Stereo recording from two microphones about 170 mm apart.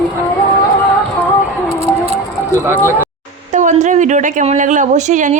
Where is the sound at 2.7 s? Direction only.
10° left (ahead or behind).